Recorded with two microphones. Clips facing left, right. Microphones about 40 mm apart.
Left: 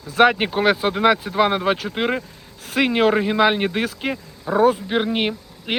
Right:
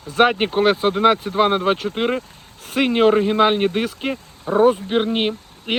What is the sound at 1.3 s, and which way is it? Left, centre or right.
Speech, right.